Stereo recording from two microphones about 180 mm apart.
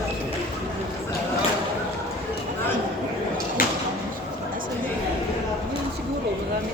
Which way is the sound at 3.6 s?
50° left (ahead or behind).